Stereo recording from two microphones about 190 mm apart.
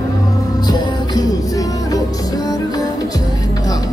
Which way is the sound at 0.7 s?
20° left (ahead or behind).